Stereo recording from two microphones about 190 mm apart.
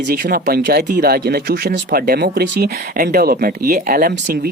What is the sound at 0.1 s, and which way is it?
Speech, 50° right (ahead or behind).